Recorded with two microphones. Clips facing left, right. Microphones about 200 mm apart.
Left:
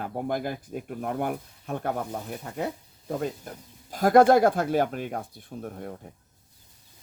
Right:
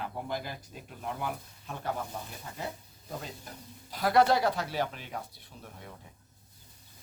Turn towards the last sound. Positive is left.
turn(degrees=50)  # may be behind; listen again after turning